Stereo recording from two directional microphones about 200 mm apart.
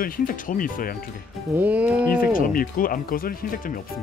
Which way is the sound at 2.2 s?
45° left (ahead or behind).